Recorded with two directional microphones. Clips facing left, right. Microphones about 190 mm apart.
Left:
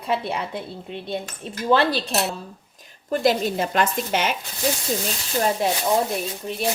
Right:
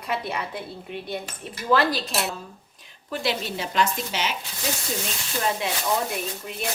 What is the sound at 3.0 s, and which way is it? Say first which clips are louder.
Speech: left 7 dB; 45° left (ahead or behind).